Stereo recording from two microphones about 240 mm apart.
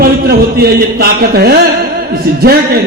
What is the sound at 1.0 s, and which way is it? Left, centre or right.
Speech, right.